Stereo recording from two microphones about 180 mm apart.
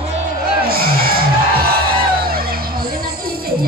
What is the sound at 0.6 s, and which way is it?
Speech, 55° right (ahead or behind).